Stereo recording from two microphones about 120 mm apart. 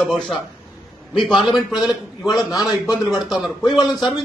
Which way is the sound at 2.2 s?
35° left (ahead or behind).